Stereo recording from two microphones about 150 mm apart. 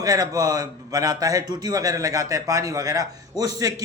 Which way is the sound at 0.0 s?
25° right (ahead or behind).